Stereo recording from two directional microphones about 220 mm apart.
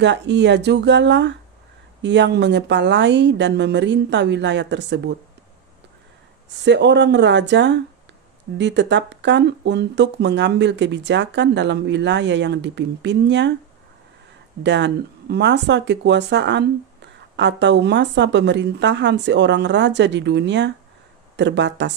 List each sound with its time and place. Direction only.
0.0 s speech: 50° right (ahead or behind)
6.6 s speech: 55° right (ahead or behind)
14.6 s speech: 50° right (ahead or behind)